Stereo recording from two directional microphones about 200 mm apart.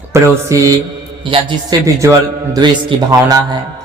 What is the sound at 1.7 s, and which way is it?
A man's voice, 20° right (ahead or behind).